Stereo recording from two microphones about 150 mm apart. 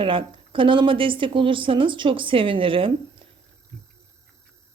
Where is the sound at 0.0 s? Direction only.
35° right (ahead or behind).